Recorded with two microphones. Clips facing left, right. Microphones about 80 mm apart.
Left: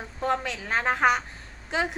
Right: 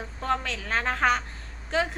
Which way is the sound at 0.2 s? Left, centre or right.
Centre.